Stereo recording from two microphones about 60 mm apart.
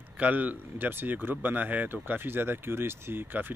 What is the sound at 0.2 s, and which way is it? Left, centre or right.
Speech, right.